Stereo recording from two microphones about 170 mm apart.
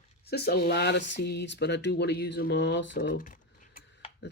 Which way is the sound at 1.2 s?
85° left.